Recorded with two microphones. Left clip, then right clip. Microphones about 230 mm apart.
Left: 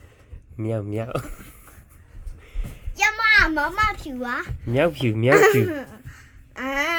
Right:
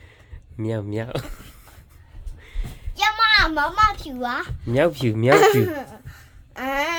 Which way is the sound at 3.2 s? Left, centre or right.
Centre.